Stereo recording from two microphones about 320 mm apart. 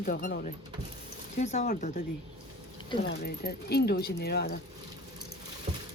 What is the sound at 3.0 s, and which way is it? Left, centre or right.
Speech, left.